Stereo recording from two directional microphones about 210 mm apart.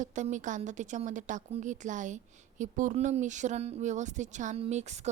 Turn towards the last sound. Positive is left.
turn(degrees=-35)  # may be behind; listen again after turning